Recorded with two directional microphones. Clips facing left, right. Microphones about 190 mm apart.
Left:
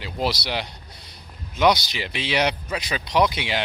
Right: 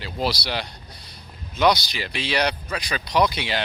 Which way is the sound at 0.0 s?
20° left (ahead or behind).